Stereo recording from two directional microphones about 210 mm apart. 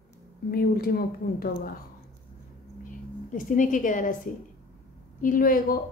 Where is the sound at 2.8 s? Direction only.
40° left (ahead or behind).